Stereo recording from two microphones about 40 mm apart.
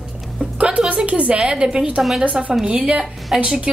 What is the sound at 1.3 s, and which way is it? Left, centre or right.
Speech, centre.